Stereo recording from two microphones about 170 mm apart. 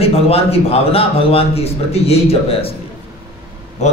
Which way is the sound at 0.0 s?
35° left (ahead or behind).